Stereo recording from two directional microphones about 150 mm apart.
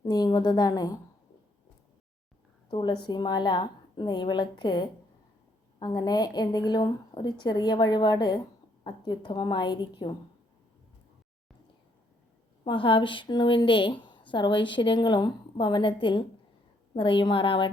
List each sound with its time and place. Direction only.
0.0 s a woman's voice: 25° left (ahead or behind)
2.6 s a woman's voice: 30° left (ahead or behind)
12.6 s a woman's voice: 35° left (ahead or behind)